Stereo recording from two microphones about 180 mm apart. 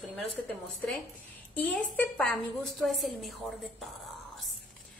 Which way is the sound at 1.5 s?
10° left (ahead or behind).